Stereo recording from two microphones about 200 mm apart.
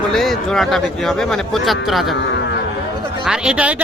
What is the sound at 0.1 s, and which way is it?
Speech, centre (ahead or behind).